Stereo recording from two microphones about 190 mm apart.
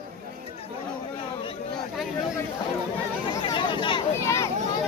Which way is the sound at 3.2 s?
25° left (ahead or behind).